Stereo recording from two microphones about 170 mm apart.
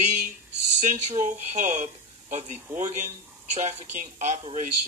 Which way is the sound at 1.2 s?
50° right (ahead or behind).